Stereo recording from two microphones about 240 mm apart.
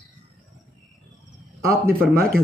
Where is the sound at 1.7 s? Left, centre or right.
Right.